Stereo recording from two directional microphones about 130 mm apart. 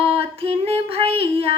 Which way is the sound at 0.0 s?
45° right (ahead or behind).